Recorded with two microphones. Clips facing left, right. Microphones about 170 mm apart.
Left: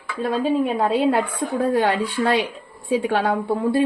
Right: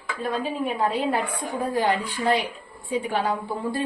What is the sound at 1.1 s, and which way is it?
Speech, 70° left (ahead or behind).